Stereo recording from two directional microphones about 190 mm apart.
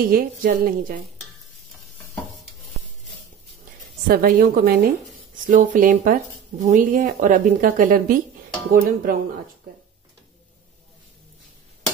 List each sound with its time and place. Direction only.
0.0 s speech: 50° right (ahead or behind)
4.1 s speech: 50° right (ahead or behind)
5.5 s speech: 45° right (ahead or behind)